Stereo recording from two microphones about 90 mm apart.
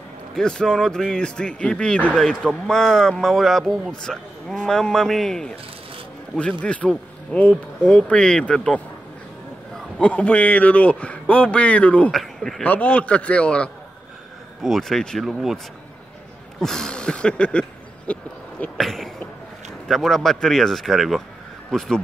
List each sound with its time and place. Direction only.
0.3 s a man's voice: 10° left (ahead or behind)
6.6 s a man's voice: 15° left (ahead or behind)
12.1 s speech: 5° left (ahead or behind)
12.6 s a man's voice: 20° left (ahead or behind); by 15.6 s centre (ahead or behind)
16.5 s a sound: 5° left (ahead or behind)
18.8 s a sound: 5° left (ahead or behind)
19.9 s speech: centre (ahead or behind)